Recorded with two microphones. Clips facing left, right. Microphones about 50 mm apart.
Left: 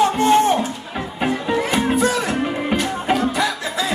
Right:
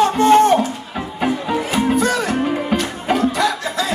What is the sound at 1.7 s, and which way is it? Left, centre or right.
Music, centre.